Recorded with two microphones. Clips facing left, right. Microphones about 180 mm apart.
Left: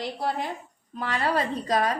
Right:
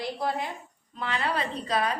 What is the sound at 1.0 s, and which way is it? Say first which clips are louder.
A woman's voice: left 3 dB; 40° left (ahead or behind).